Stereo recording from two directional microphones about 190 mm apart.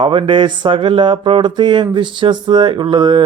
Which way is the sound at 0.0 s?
25° right (ahead or behind).